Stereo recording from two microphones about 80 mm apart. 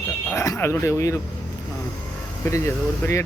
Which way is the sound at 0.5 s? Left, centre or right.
Left.